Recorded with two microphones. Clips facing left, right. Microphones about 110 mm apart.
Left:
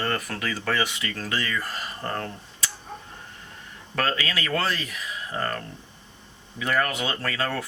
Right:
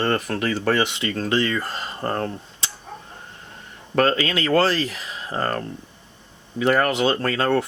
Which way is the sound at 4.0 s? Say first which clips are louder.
Right 7 dB; 25° right (ahead or behind).